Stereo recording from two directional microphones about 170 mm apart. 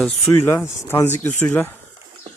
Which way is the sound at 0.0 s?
10° left (ahead or behind).